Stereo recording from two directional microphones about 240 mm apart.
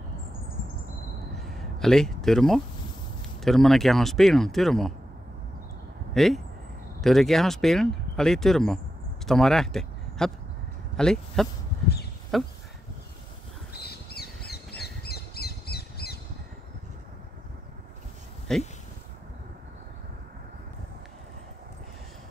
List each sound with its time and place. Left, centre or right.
1.5 s a sound: centre
3.4 s speech: centre
6.1 s speech: centre
13.7 s bird: left
18.5 s speech: centre